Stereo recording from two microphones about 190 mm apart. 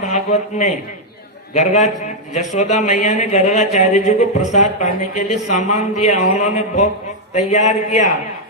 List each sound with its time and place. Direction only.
0.1 s a man's voice: 40° left (ahead or behind)